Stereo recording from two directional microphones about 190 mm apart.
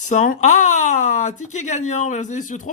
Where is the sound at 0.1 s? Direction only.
40° left (ahead or behind).